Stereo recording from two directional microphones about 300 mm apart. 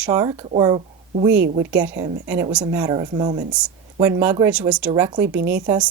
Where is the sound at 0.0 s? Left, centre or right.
Centre.